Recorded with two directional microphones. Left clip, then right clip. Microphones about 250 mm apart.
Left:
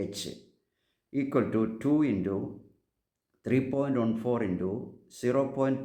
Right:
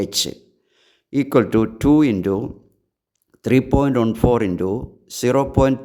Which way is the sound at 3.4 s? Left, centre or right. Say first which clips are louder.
Right 11 dB; right.